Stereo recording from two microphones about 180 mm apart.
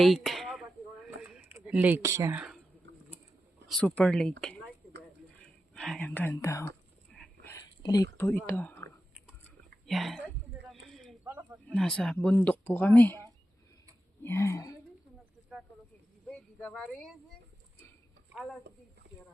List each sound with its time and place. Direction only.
0.0 s a sound: centre (ahead or behind)
1.5 s speech: 10° right (ahead or behind)
3.7 s speech: 5° left (ahead or behind)
5.7 s speech: 5° left (ahead or behind)
7.1 s a sound: 5° left (ahead or behind)
7.5 s whispering: 20° left (ahead or behind)
8.3 s speech: 10° left (ahead or behind)
9.8 s a sound: centre (ahead or behind)
11.3 s snake: 10° right (ahead or behind)
11.7 s speech: 5° left (ahead or behind)
16.3 s speech: 5° left (ahead or behind)
19.1 s a sound: 70° right (ahead or behind)